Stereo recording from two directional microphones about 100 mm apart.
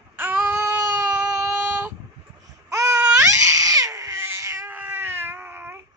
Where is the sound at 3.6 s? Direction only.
35° right (ahead or behind).